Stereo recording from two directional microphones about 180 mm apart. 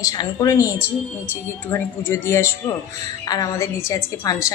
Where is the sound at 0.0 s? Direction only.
20° left (ahead or behind).